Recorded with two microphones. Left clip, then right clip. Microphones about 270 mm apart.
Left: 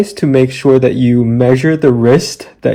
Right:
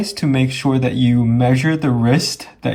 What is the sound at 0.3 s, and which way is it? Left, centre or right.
Speech, centre.